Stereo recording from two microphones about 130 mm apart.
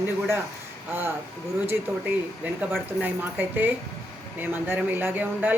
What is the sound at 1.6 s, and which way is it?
Speech, 15° right (ahead or behind).